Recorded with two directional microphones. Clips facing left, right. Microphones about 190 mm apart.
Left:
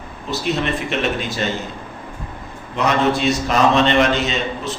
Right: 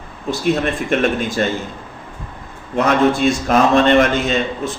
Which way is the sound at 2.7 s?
50° right (ahead or behind).